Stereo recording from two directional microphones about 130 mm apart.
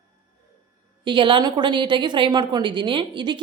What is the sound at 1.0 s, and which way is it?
A woman's voice, 40° right (ahead or behind).